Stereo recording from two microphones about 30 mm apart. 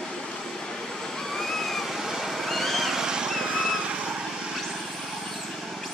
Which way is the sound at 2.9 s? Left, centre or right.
Right.